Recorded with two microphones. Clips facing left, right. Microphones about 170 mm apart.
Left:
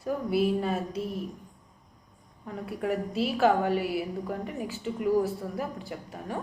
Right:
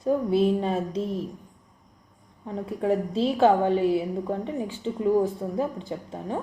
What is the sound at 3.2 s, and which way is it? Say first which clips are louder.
A woman's voice: right 4 dB; 25° right (ahead or behind).